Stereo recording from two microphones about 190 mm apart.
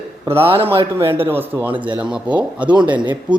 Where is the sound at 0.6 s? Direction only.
15° right (ahead or behind).